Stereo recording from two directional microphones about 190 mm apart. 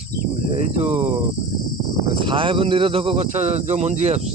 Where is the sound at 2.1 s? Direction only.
25° right (ahead or behind).